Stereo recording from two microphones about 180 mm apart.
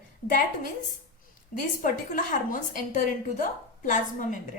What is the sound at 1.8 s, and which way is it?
A woman's voice, 50° left (ahead or behind).